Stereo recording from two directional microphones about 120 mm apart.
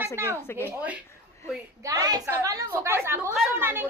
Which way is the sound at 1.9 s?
30° right (ahead or behind).